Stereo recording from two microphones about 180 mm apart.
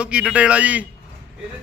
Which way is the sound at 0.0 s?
5° right (ahead or behind).